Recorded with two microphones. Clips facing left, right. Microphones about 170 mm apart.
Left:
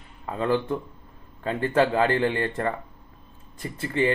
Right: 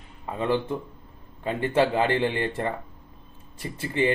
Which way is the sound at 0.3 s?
15° right (ahead or behind).